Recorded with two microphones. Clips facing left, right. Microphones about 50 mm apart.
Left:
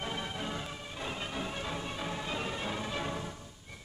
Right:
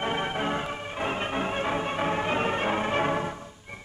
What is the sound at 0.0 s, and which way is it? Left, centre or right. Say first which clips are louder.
Music: right 9 dB; right.